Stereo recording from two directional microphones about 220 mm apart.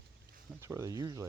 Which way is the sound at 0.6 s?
15° right (ahead or behind).